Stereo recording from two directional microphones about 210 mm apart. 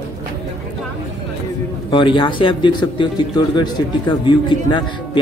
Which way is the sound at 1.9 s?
25° left (ahead or behind).